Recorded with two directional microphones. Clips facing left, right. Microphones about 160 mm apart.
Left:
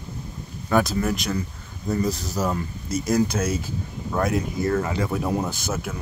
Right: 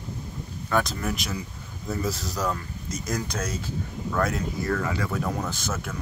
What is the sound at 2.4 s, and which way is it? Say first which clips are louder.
Speech: left 4 dB; 25° left (ahead or behind).